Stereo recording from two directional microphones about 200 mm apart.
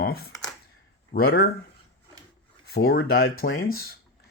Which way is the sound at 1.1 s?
50° left (ahead or behind).